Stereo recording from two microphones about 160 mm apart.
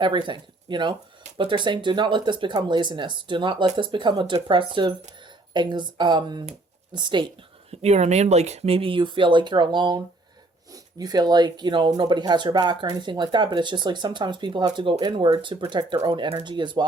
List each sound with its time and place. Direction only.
0.0 s speech: 30° right (ahead or behind)
7.7 s speech: 40° right (ahead or behind)